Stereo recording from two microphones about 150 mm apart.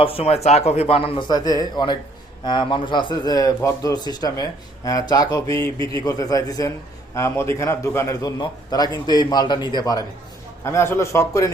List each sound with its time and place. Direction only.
0.0 s a man's voice: 40° left (ahead or behind); by 11.5 s 20° left (ahead or behind)